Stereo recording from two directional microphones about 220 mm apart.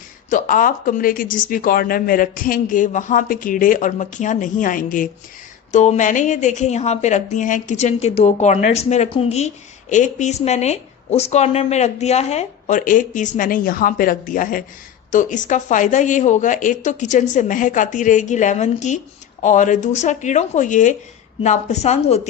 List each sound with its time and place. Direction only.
0.3 s speech: 35° left (ahead or behind)